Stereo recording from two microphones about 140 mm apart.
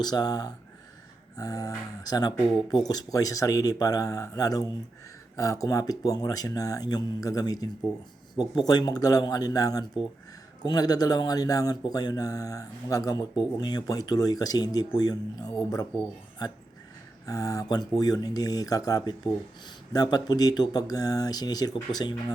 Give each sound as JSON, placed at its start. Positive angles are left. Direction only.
{"t": 0.0, "sound": "speech", "side_deg": 30}
{"t": 17.2, "sound": "speech", "side_deg": 25}